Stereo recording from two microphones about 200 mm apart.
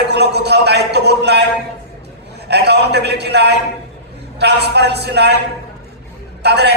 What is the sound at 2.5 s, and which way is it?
A man's voice, 55° right (ahead or behind).